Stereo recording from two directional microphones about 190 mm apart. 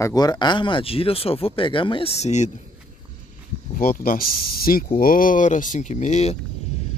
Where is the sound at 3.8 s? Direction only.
50° left (ahead or behind).